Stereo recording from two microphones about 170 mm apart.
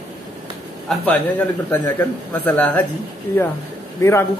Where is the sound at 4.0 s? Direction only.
15° left (ahead or behind).